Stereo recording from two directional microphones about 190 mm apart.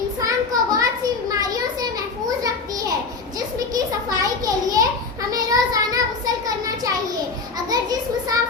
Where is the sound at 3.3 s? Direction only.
20° right (ahead or behind).